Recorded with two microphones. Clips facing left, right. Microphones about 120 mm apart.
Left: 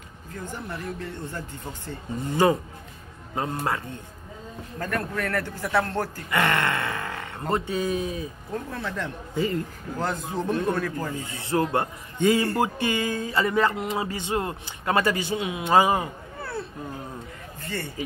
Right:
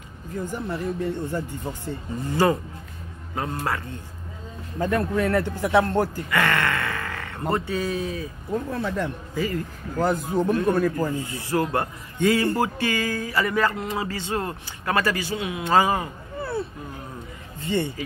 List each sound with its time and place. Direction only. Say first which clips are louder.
0.5 s a man's voice: right 5 dB; 20° right (ahead or behind)
2.2 s speech: even; 20° left (ahead or behind)
3.5 s speech: right 1 dB; 20° left (ahead or behind)
4.7 s a man's voice: right 6 dB; 20° right (ahead or behind)
6.3 s grunt: even; 20° left (ahead or behind)
7.5 s speech: left 1 dB; 20° left (ahead or behind)
8.5 s a man's voice: right 5 dB; 5° right (ahead or behind)
9.3 s speech: left 3 dB; 25° left (ahead or behind)
9.9 s a man's voice: right 6 dB; 10° right (ahead or behind)
11.2 s speech: even; 25° left (ahead or behind)
16.3 s a sound: right 6 dB; centre (ahead or behind)
17.6 s a man's voice: right 8 dB; 20° right (ahead or behind)